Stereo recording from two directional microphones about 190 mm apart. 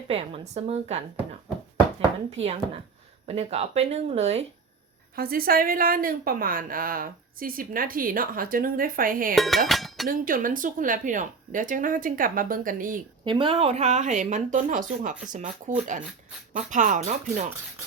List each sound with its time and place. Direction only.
0.1 s speech: 30° right (ahead or behind)
2.3 s speech: 35° right (ahead or behind)
5.1 s a woman's voice: 50° right (ahead or behind)
9.3 s speech: centre (ahead or behind)
10.1 s a woman's voice: 45° right (ahead or behind)
13.2 s a woman's voice: 25° right (ahead or behind)